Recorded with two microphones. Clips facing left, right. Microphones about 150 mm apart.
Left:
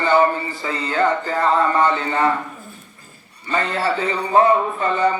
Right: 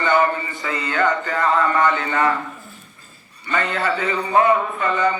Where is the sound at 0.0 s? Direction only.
30° left (ahead or behind).